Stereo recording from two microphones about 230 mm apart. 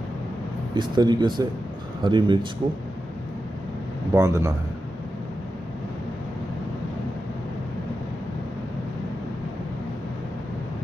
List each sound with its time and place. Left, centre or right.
0.7 s speech: centre
4.1 s a man's voice: centre